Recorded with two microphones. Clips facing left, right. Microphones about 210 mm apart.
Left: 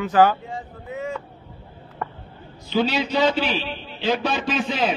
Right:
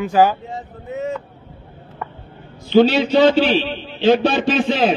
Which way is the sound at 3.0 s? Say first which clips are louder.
Right 7 dB; 30° right (ahead or behind).